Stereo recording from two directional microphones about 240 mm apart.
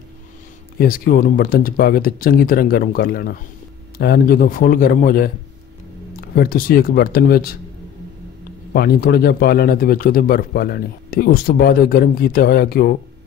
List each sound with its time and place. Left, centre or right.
0.7 s a man's voice: left
8.7 s a man's voice: left